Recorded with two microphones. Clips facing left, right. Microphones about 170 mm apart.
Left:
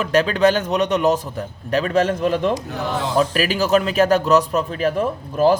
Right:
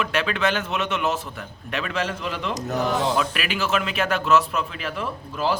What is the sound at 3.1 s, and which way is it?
A man's voice, 35° left (ahead or behind).